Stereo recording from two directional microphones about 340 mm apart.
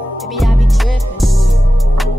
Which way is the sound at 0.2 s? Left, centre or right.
Centre.